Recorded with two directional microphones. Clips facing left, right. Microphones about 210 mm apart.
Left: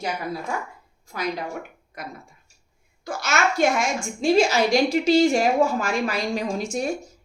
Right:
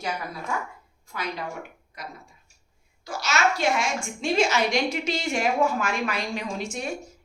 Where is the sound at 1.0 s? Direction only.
40° left (ahead or behind).